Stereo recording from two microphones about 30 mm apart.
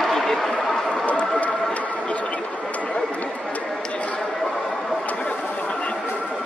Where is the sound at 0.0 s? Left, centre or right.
Centre.